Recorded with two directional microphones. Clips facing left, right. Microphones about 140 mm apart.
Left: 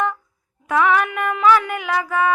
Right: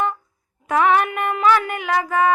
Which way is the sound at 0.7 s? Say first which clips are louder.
Right 1 dB; 45° right (ahead or behind).